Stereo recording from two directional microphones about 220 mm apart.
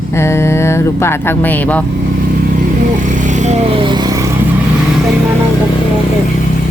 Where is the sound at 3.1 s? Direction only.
35° right (ahead or behind).